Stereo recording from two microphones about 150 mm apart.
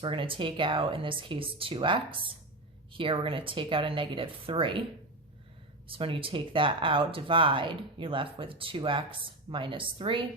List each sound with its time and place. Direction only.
0.0 s speech: 35° right (ahead or behind)
5.9 s speech: 35° right (ahead or behind)